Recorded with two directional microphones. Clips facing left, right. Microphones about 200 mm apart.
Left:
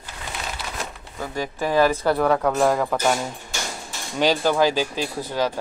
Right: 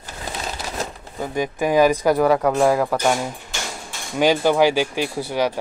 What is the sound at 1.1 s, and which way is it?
Speech, 15° right (ahead or behind).